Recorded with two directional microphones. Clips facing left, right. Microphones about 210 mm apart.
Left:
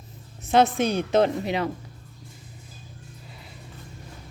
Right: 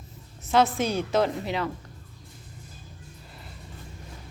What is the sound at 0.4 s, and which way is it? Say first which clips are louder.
A woman's voice: left 3 dB; 20° left (ahead or behind).